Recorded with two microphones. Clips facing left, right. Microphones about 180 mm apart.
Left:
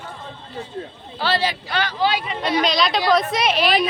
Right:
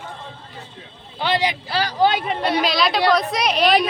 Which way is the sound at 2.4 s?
Centre (ahead or behind).